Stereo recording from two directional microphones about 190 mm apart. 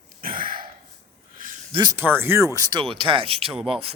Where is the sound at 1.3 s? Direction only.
45° right (ahead or behind).